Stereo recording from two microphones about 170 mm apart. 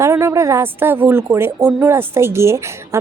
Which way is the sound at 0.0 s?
15° right (ahead or behind).